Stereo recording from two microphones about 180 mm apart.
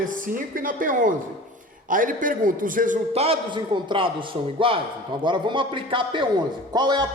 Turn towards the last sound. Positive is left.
turn(degrees=-25)  # may be behind; listen again after turning